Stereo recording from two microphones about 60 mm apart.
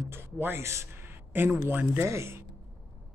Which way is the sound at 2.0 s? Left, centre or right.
Right.